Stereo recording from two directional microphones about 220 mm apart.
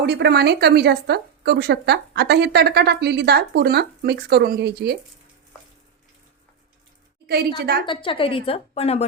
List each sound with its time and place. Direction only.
0.0 s a woman's voice: 50° right (ahead or behind)
7.3 s a woman's voice: 45° right (ahead or behind)
7.9 s a woman's voice: 25° left (ahead or behind)